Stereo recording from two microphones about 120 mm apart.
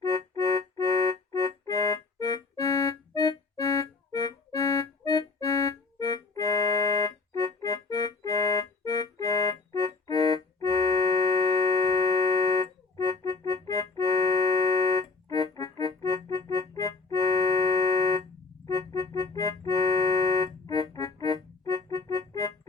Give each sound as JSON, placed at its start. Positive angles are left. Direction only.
{"t": 0.3, "sound": "music", "side_deg": 30}
{"t": 16.5, "sound": "keyboard", "side_deg": 30}
{"t": 18.6, "sound": "music", "side_deg": 30}
{"t": 19.1, "sound": "organ", "side_deg": 30}
{"t": 20.9, "sound": "keyboard", "side_deg": 30}